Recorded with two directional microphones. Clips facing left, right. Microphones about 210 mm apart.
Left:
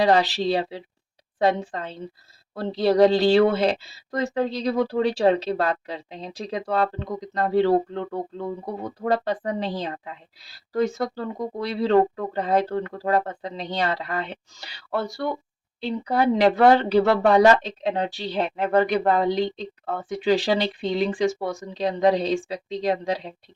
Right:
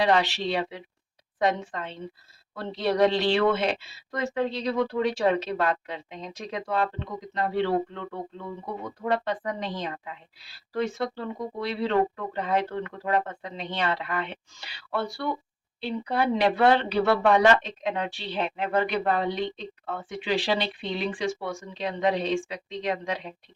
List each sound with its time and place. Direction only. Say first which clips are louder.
0.0 s speech: left 4 dB; 35° left (ahead or behind)